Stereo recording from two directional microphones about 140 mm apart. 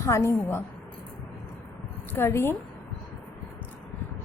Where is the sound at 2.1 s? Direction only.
15° left (ahead or behind).